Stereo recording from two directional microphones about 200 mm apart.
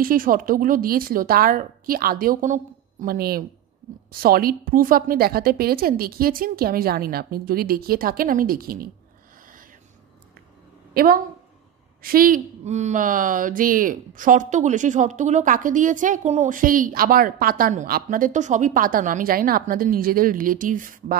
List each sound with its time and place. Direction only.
0.0 s speech: 45° right (ahead or behind)
9.4 s a sound: 45° right (ahead or behind)
12.0 s speech: 45° right (ahead or behind)